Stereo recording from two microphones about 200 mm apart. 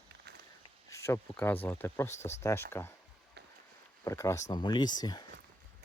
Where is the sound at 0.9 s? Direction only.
15° left (ahead or behind).